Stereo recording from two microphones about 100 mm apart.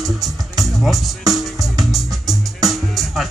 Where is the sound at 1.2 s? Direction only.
35° right (ahead or behind).